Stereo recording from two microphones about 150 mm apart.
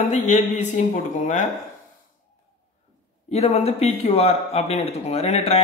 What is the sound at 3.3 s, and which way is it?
Speech, 45° left (ahead or behind).